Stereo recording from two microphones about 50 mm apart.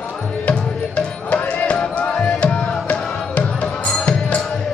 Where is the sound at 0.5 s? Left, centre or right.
Left.